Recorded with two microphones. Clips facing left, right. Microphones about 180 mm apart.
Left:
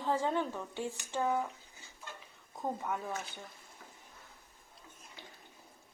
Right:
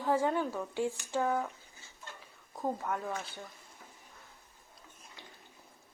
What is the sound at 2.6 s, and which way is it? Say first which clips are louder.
Speech: right 2 dB; centre (ahead or behind).